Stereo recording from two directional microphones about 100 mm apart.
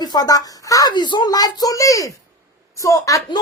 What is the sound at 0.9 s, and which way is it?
A child's voice, 50° left (ahead or behind).